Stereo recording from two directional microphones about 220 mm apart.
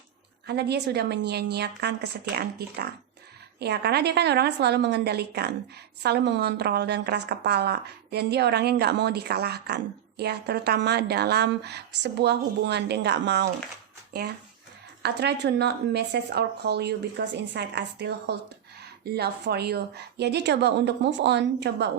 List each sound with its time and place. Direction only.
0.4 s a woman's voice: 50° right (ahead or behind)
15.0 s a woman's voice: 50° right (ahead or behind)